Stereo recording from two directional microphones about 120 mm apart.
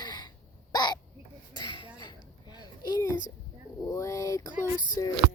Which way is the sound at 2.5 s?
35° left (ahead or behind).